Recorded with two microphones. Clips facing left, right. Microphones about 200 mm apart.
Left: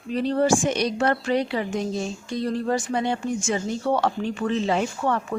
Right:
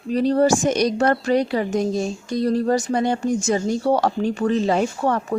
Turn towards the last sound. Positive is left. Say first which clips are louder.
# right 3 dB
turn(degrees=-40)  # may be behind; listen again after turning